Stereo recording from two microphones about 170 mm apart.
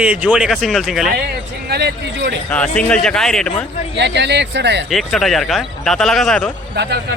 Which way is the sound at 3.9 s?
90° right.